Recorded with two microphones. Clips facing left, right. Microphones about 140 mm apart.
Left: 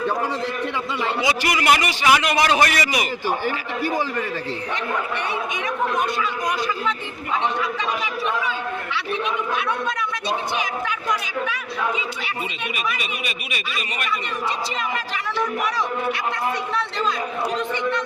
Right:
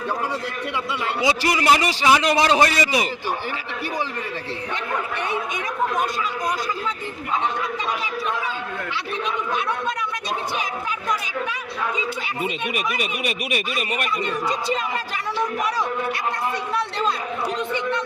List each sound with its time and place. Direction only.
1.2 s a man's voice: 25° right (ahead or behind)
13.0 s speech: 55° right (ahead or behind)